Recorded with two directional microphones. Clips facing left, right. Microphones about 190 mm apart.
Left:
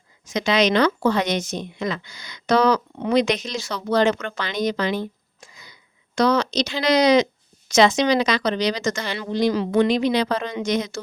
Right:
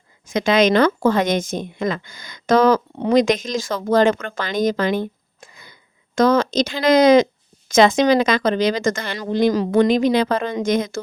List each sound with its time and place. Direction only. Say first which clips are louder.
0.3 s speech: right 4 dB; 50° right (ahead or behind)